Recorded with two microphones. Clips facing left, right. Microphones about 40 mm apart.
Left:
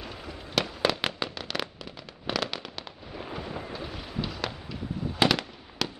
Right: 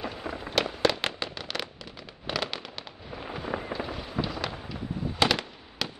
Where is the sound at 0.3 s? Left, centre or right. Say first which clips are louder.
Right 5 dB; right.